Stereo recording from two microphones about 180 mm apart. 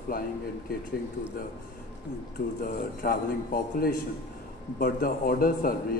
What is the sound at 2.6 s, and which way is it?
A man's voice, 55° left (ahead or behind).